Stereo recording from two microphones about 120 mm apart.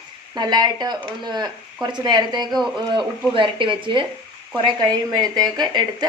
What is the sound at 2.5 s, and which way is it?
Speech, centre (ahead or behind).